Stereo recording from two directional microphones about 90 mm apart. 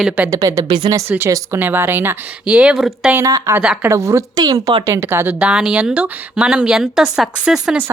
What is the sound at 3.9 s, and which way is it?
Speech, 35° right (ahead or behind).